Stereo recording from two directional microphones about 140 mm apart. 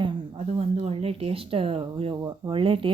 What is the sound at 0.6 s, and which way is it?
A woman's voice, 45° right (ahead or behind).